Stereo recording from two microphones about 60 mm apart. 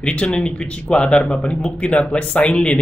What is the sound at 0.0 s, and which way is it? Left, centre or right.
Speech, centre.